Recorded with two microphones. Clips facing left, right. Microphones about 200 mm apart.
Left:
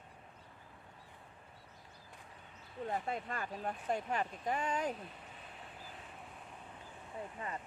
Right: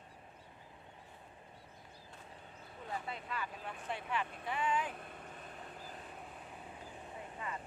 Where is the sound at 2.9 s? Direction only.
45° left (ahead or behind).